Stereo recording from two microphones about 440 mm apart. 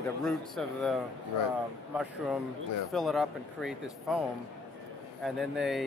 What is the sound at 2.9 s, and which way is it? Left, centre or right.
Speech, centre.